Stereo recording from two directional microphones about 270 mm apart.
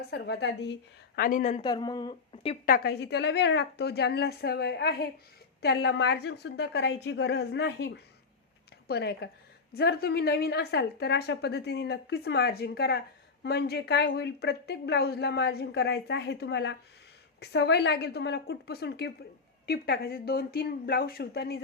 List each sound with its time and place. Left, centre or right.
0.1 s a woman's voice: left